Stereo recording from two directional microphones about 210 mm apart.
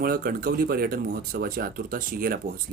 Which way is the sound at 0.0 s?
45° right (ahead or behind).